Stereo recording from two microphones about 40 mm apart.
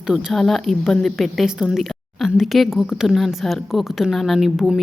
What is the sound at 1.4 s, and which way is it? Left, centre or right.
Speech, centre.